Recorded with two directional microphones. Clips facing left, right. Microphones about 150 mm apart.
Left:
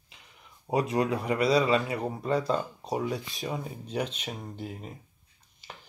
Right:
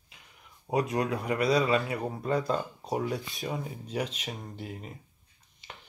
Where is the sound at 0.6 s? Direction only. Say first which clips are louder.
Left 2 dB; 5° left (ahead or behind).